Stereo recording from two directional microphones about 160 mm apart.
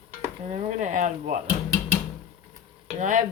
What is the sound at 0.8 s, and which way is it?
Speech, 50° right (ahead or behind).